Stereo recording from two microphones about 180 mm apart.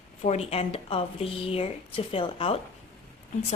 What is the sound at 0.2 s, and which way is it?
Speech, 35° left (ahead or behind).